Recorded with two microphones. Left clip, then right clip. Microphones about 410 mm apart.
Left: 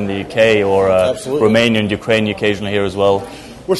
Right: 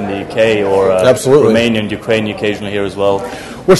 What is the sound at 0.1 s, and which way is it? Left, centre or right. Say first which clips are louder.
Speech: even; left.